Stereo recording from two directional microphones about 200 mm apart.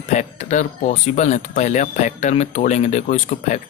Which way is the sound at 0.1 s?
35° left (ahead or behind).